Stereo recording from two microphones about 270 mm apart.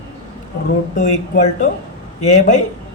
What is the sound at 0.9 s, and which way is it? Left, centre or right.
Speech, left.